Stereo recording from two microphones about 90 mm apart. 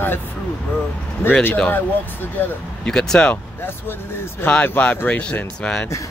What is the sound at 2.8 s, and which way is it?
Speech, 5° left (ahead or behind).